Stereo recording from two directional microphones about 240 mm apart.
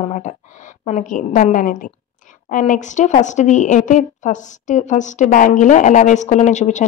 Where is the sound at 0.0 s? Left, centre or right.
Left.